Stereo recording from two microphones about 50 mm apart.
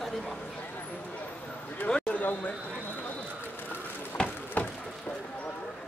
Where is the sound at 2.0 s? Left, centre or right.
Left.